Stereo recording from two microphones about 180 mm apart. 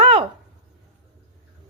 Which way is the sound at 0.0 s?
30° right (ahead or behind).